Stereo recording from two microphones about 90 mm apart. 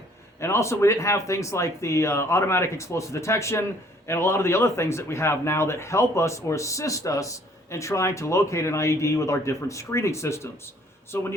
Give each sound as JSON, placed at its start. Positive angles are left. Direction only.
{"t": 0.3, "sound": "speech", "side_deg": 30}